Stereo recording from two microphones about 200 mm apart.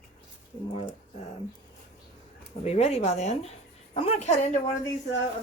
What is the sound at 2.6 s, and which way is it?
A woman's voice, 30° left (ahead or behind).